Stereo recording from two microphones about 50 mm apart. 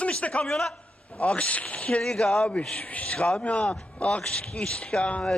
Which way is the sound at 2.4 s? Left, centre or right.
Left.